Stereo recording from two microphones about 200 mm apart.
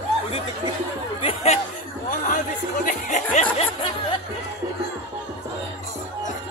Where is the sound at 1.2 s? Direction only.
30° left (ahead or behind).